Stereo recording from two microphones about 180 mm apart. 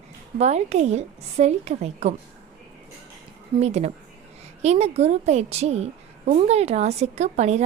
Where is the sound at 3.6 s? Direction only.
35° right (ahead or behind).